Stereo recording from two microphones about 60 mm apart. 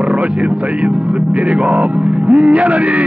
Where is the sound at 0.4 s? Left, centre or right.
Centre.